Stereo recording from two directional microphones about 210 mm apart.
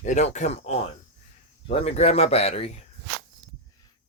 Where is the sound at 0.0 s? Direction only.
35° left (ahead or behind).